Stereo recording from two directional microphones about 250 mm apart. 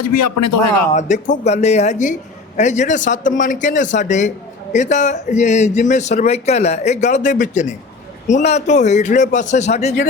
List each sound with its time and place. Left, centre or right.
0.0 s a man's voice: left
0.9 s a man's voice: left